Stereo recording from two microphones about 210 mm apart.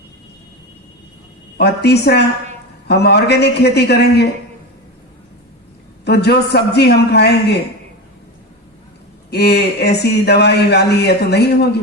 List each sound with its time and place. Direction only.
1.5 s speech: 50° left (ahead or behind)
6.1 s speech: 50° left (ahead or behind)
9.3 s speech: 50° left (ahead or behind)